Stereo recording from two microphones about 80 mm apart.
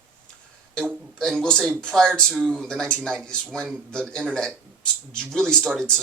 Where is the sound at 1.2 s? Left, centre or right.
Centre.